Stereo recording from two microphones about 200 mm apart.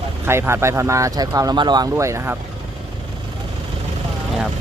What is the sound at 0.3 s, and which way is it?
Speech, 15° right (ahead or behind).